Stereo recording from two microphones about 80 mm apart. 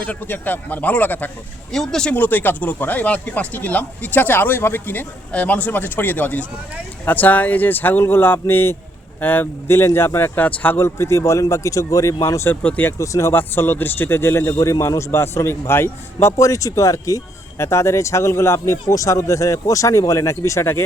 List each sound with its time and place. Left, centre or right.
0.0 s speech: left
1.7 s speech: centre
2.1 s speech: left
10.8 s speech: left
12.6 s speech: centre
13.0 s speech: left
13.3 s speech: left
16.4 s speech: left